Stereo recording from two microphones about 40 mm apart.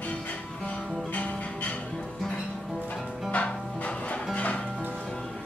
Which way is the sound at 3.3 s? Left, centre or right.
Left.